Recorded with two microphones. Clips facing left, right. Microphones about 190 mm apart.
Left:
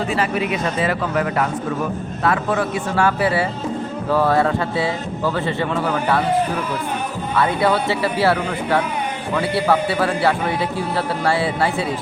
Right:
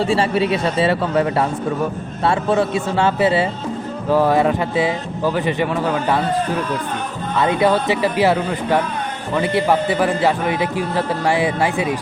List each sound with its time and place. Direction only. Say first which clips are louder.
0.0 s a man's voice: right 4 dB; 30° right (ahead or behind); by 6.2 s 15° right (ahead or behind)
7.3 s a man's voice: right 2 dB; 15° right (ahead or behind)